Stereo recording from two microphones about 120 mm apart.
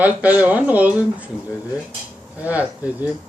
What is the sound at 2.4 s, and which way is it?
Speech, 15° right (ahead or behind).